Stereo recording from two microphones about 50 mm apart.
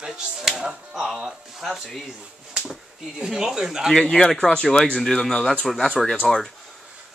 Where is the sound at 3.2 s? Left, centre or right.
Centre.